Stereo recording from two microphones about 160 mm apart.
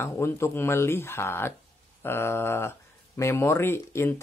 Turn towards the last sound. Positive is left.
turn(degrees=15)  # may be behind; listen again after turning